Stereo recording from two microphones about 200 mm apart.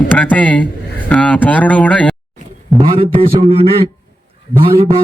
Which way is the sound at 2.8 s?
30° right (ahead or behind).